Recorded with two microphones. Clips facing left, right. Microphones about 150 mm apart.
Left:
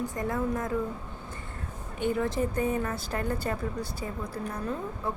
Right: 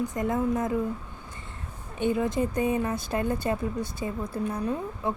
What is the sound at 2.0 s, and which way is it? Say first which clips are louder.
Speech: right 2 dB; 20° right (ahead or behind).